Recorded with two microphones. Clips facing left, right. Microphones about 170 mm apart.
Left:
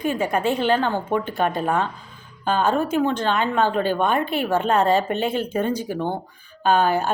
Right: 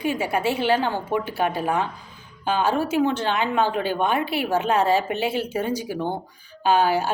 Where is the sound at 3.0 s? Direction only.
10° right (ahead or behind).